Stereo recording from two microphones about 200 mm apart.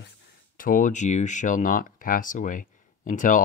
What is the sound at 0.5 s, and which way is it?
Speech, 45° left (ahead or behind).